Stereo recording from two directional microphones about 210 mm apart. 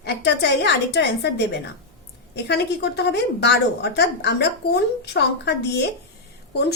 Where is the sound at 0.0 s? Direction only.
55° left (ahead or behind).